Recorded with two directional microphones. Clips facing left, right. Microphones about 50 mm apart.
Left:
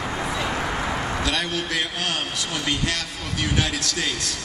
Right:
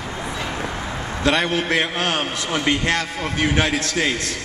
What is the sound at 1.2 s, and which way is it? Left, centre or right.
A man's voice, right.